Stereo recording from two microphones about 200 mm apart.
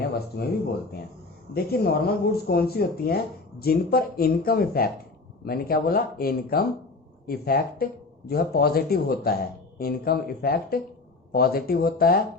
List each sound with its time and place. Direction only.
0.4 s speech: 55° left (ahead or behind)
1.5 s speech: 50° left (ahead or behind)